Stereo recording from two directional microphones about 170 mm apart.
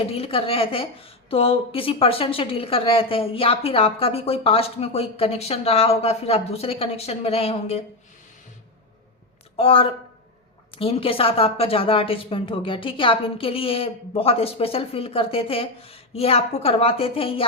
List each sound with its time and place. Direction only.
0.1 s a woman's voice: 35° left (ahead or behind)
9.6 s a woman's voice: 35° left (ahead or behind)